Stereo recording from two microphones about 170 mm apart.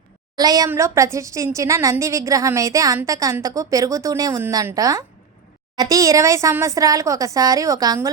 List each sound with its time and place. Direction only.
0.3 s a woman's voice: 20° right (ahead or behind)